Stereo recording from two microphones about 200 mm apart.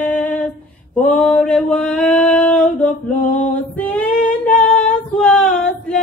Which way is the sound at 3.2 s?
40° left (ahead or behind).